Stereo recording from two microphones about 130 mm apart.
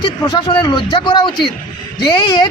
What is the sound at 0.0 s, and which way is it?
A man's voice, 40° left (ahead or behind).